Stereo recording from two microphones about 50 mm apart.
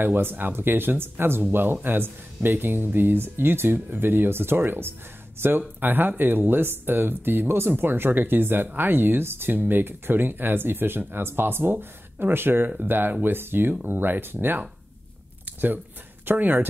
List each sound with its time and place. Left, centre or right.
0.0 s speech: right
16.3 s speech: right